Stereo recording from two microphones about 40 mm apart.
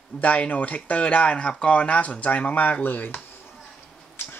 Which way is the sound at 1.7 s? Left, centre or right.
Left.